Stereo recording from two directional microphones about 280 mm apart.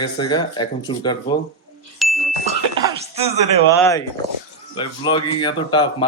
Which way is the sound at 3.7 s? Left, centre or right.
Centre.